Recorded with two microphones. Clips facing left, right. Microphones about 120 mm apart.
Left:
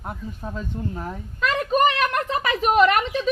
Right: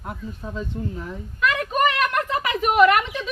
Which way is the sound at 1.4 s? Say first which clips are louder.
Left 1 dB; 35° left (ahead or behind).